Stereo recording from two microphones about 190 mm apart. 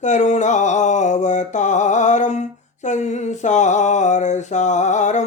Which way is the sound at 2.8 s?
40° left (ahead or behind).